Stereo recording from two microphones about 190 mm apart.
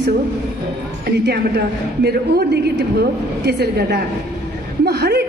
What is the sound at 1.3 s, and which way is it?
A woman's voice, 60° right (ahead or behind).